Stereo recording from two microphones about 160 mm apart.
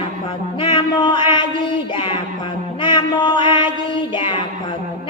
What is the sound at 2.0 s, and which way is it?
Music, 35° left (ahead or behind).